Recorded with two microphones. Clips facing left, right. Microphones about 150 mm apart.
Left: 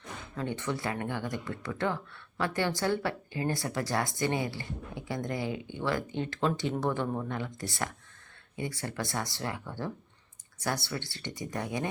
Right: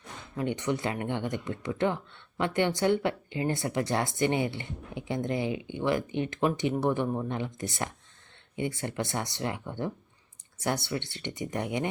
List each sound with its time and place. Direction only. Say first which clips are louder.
0.3 s speech: right 4 dB; 15° right (ahead or behind)